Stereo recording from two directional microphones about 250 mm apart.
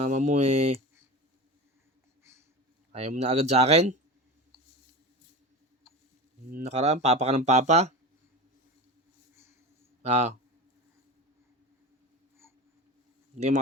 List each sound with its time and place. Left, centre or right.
0.0 s speech: right
2.9 s speech: right
6.5 s speech: right
10.0 s speech: right
13.3 s speech: right